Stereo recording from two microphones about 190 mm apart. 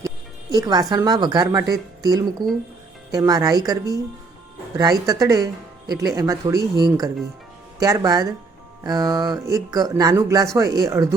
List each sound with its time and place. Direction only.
0.5 s speech: 20° right (ahead or behind)